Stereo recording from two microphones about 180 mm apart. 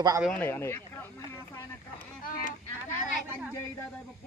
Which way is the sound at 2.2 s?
50° left (ahead or behind).